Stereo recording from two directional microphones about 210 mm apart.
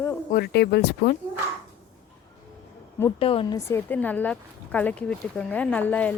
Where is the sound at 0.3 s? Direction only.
50° left (ahead or behind).